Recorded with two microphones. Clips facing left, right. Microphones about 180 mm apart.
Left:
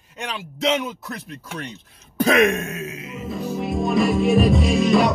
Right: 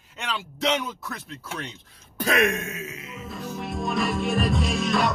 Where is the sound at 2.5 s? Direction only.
35° left (ahead or behind).